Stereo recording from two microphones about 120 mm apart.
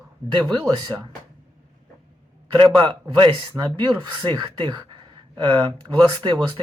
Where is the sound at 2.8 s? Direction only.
45° right (ahead or behind).